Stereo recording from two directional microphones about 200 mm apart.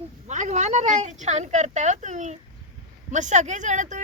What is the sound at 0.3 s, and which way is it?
Speech, 35° right (ahead or behind).